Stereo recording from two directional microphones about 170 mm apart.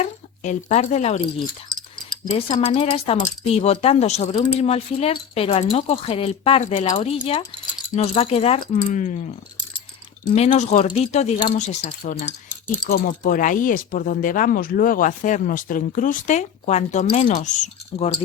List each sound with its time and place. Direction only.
0.0 s speech: 40° left (ahead or behind)
2.6 s speech: 35° left (ahead or behind)
8.7 s speech: 45° left (ahead or behind)
10.3 s speech: 40° left (ahead or behind)
11.9 s speech: 55° left (ahead or behind)